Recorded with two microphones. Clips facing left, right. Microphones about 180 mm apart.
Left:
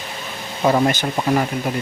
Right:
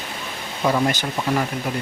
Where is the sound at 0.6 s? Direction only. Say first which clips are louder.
Left 3 dB; 40° left (ahead or behind).